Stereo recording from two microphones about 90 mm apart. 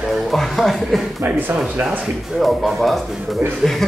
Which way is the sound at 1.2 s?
20° right (ahead or behind).